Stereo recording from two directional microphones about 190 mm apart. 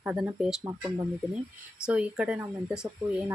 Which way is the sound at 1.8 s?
5° right (ahead or behind).